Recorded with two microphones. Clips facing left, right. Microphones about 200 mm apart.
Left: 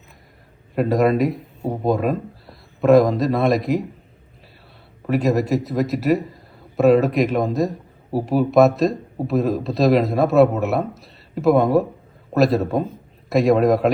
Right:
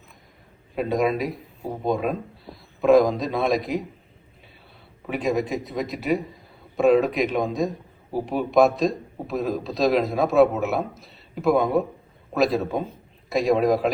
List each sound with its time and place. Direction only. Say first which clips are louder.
0.8 s speech: left 5 dB; centre (ahead or behind)
5.0 s speech: left 5 dB; centre (ahead or behind)